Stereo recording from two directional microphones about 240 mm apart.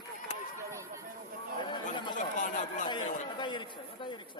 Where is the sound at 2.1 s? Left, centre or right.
Left.